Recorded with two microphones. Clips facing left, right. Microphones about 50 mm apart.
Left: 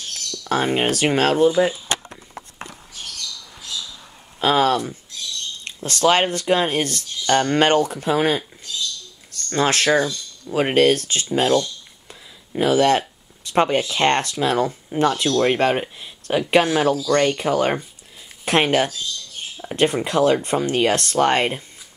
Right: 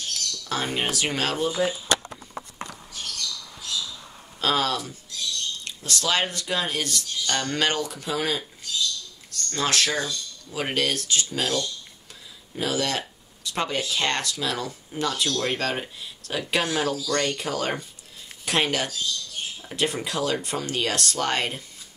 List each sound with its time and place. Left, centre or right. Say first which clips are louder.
0.1 s speech: left 8 dB; left
4.4 s speech: left 6 dB; centre
4.6 s speech: left 8 dB; left
9.5 s speech: left 7 dB; left